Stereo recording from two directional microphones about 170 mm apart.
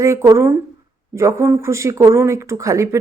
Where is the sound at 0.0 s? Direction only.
20° right (ahead or behind).